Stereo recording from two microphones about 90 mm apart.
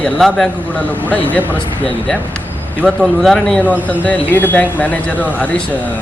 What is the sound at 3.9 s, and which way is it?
Speech, 20° left (ahead or behind).